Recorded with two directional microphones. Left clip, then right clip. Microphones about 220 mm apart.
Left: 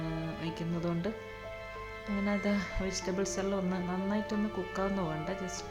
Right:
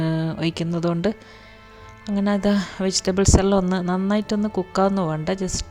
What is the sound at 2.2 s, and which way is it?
Speech, 40° right (ahead or behind).